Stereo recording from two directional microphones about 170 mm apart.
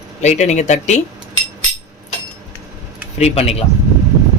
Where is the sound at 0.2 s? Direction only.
40° left (ahead or behind).